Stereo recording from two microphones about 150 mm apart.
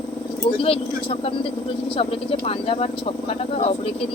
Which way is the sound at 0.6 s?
40° left (ahead or behind).